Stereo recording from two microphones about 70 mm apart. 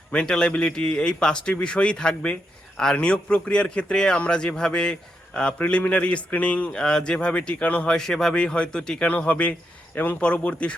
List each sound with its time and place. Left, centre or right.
0.1 s a man's voice: centre
7.9 s a man's voice: centre
9.0 s speech: left